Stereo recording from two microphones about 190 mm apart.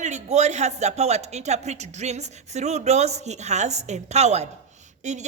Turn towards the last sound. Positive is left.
turn(degrees=-40)  # may be behind; listen again after turning